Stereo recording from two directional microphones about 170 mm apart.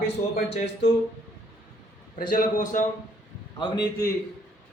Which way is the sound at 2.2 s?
55° left (ahead or behind).